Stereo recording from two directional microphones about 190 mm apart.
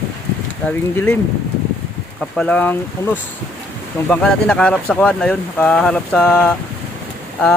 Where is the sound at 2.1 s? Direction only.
5° left (ahead or behind).